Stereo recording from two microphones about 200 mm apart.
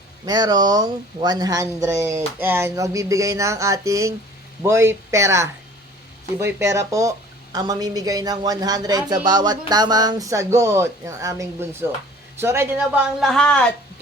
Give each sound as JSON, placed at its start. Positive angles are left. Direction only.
{"t": 0.3, "sound": "speech", "side_deg": -20}
{"t": 13.1, "sound": "speech", "side_deg": 0}